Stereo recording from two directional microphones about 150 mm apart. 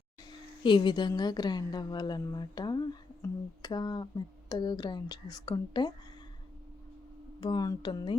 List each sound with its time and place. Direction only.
0.3 s speech: 30° left (ahead or behind)
7.4 s speech: 25° left (ahead or behind)